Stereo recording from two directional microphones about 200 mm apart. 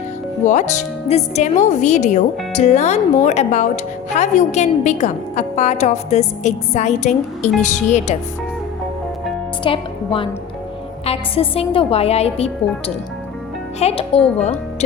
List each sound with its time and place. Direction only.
0.4 s a woman's voice: 35° left (ahead or behind)
9.6 s a woman's voice: 25° left (ahead or behind)
13.7 s a woman's voice: 30° left (ahead or behind)